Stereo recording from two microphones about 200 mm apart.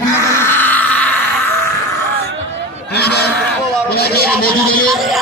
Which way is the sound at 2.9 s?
55° left (ahead or behind).